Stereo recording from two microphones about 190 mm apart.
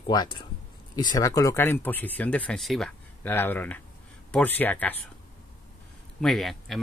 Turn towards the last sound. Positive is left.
turn(degrees=0)  # may be behind; listen again after turning